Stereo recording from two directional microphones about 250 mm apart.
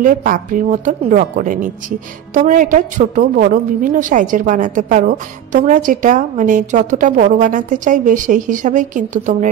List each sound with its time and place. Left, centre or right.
0.0 s a woman's voice: right